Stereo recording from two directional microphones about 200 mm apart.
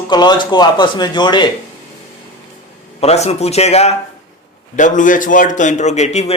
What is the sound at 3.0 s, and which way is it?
A man's voice, 30° left (ahead or behind).